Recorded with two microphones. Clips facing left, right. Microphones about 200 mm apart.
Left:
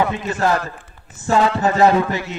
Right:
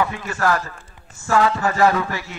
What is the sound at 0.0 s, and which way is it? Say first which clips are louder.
A man's voice: left 3 dB; 20° left (ahead or behind).